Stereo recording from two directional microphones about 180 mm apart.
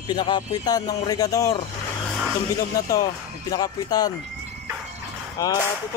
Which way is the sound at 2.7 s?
20° left (ahead or behind).